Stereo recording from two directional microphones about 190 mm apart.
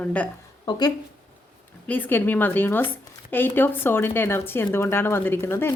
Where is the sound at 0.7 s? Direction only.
20° left (ahead or behind).